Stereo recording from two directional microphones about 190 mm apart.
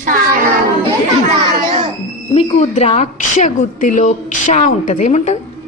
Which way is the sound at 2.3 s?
35° left (ahead or behind).